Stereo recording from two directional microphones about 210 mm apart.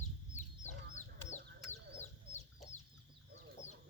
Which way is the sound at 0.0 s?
35° left (ahead or behind).